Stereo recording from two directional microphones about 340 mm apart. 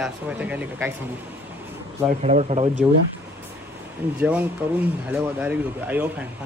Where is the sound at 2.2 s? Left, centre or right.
Centre.